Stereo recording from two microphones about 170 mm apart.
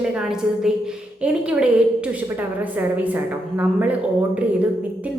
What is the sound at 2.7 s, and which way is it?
A woman's voice, 10° right (ahead or behind).